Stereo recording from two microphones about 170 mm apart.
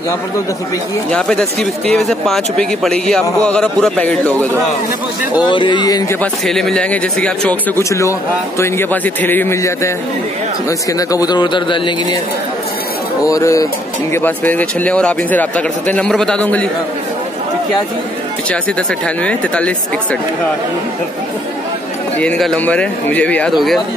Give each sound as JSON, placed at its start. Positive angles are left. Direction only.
{"t": 1.1, "sound": "speech", "side_deg": 5}
{"t": 5.4, "sound": "a man's voice", "side_deg": 30}
{"t": 6.4, "sound": "a man's voice", "side_deg": 5}
{"t": 10.9, "sound": "a man's voice", "side_deg": 20}
{"t": 13.2, "sound": "a man's voice", "side_deg": 20}
{"t": 18.5, "sound": "a man's voice", "side_deg": 5}
{"t": 22.2, "sound": "a man's voice", "side_deg": 5}